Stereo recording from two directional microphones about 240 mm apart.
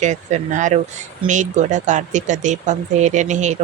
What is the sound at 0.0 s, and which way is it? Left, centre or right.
Speech, right.